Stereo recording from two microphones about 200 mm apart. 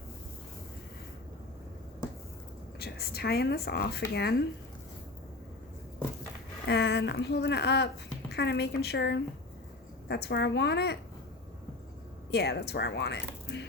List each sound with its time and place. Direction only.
2.7 s speech: 50° left (ahead or behind)
6.7 s speech: 55° left (ahead or behind)
12.3 s speech: 55° left (ahead or behind)